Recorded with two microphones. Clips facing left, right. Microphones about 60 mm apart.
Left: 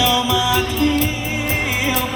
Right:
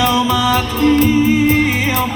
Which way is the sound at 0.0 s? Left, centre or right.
Right.